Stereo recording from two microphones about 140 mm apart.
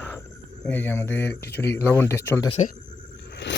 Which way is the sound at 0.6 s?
15° left (ahead or behind).